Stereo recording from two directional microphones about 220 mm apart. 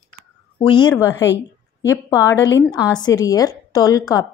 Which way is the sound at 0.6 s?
20° left (ahead or behind).